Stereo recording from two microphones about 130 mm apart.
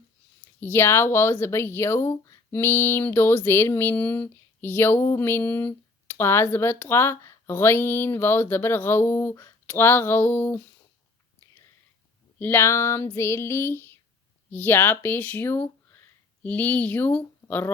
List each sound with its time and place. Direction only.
0.6 s speech: 20° left (ahead or behind)
12.4 s female singing: 15° left (ahead or behind)
14.5 s speech: 15° left (ahead or behind)
15.9 s a sound: 15° left (ahead or behind)